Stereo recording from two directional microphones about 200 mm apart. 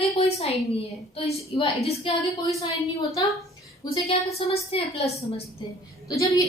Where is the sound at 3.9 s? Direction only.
30° left (ahead or behind).